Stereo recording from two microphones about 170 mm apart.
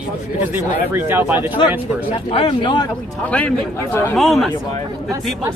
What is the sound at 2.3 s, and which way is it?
Speech, 35° left (ahead or behind).